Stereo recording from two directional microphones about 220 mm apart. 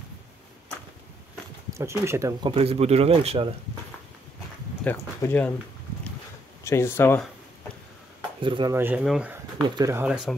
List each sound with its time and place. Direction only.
1.7 s speech: 15° right (ahead or behind)
2.5 s speech: 25° right (ahead or behind)
4.8 s speech: 10° left (ahead or behind)
6.6 s speech: 10° left (ahead or behind)
8.4 s speech: 20° right (ahead or behind)
8.7 s speech: 5° right (ahead or behind)
9.6 s speech: 15° right (ahead or behind)